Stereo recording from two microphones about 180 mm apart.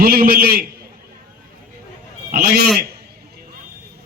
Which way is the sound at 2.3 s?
60° right (ahead or behind).